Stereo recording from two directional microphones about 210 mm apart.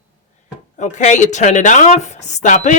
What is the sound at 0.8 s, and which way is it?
Speech, 35° left (ahead or behind).